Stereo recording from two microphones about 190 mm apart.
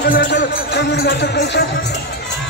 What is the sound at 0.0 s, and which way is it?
Speech, 60° left (ahead or behind).